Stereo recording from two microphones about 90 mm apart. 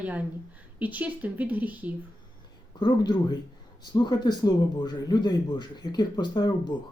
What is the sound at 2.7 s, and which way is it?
Speech, 50° left (ahead or behind).